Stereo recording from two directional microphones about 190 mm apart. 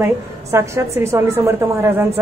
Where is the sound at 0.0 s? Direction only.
15° right (ahead or behind).